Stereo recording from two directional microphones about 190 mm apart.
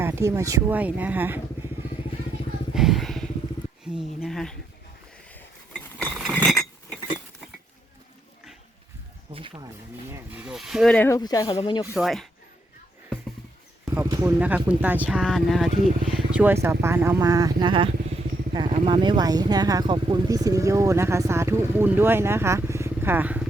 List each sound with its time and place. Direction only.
0.0 s speech: 15° right (ahead or behind)
2.7 s vehicle: centre (ahead or behind)
3.8 s speech: 5° right (ahead or behind)
5.3 s a sound: 5° left (ahead or behind)
6.1 s chink: 5° right (ahead or behind)
9.3 s a sound: 25° right (ahead or behind)
10.1 s a sound: 5° right (ahead or behind)
11.2 s speech: 20° left (ahead or behind)
11.9 s speech: centre (ahead or behind)
13.9 s speech: 15° right (ahead or behind)